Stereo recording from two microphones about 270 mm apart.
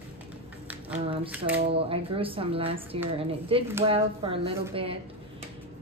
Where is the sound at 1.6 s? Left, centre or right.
Right.